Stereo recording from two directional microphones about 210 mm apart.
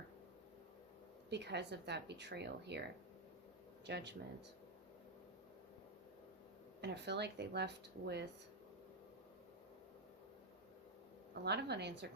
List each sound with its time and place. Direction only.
1.3 s a woman's voice: 55° right (ahead or behind)
3.8 s a woman's voice: 55° right (ahead or behind)
6.8 s a woman's voice: 55° right (ahead or behind)
11.4 s a woman's voice: 55° right (ahead or behind)